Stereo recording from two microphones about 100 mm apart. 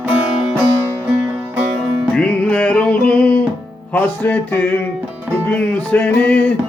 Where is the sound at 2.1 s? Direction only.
15° left (ahead or behind).